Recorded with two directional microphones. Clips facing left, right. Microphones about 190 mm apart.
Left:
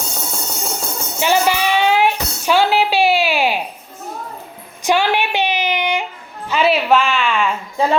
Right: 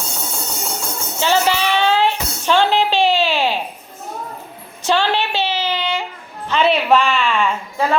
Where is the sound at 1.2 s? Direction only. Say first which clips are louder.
Left 1 dB; 15° left (ahead or behind).